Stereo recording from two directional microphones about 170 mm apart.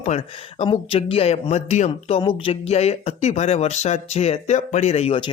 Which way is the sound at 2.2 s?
30° left (ahead or behind).